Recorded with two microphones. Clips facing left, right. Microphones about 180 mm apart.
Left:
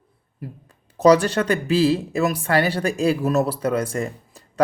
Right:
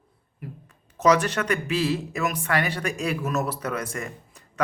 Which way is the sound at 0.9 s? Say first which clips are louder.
Left 5 dB; 35° left (ahead or behind).